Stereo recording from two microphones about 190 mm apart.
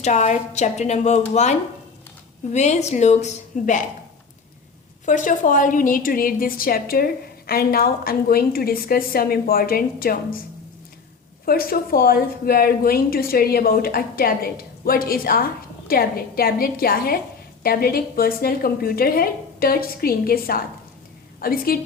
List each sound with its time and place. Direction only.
0.0 s a woman's voice: 40° left (ahead or behind)
5.0 s a woman's voice: 45° left (ahead or behind)
11.4 s a woman's voice: 50° left (ahead or behind)